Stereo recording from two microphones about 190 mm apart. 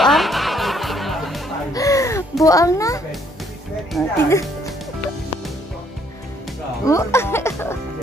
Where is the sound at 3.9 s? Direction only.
Centre (ahead or behind).